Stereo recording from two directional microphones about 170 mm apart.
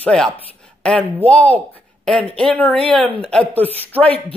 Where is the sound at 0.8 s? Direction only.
5° left (ahead or behind).